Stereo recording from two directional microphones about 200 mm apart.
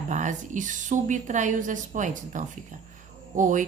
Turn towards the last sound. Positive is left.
turn(degrees=-40)  # may be behind; listen again after turning